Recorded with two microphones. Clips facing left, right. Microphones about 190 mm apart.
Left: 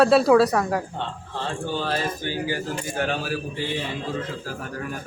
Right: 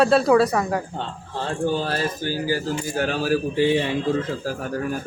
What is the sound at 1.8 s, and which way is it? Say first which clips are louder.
Speech: right 1 dB; 40° right (ahead or behind).